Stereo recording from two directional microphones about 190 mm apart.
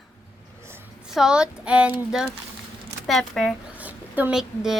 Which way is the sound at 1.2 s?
5° right (ahead or behind).